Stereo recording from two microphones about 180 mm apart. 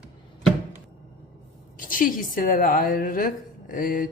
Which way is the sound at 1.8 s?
50° left (ahead or behind).